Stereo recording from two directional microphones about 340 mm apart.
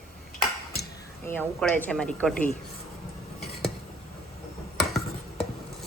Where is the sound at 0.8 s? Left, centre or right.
Centre.